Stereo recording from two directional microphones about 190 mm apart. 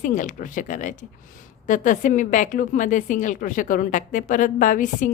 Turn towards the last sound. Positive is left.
turn(degrees=40)  # may be behind; listen again after turning